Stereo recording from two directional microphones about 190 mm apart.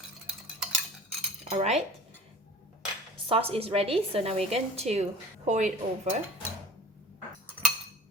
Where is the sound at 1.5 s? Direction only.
35° right (ahead or behind).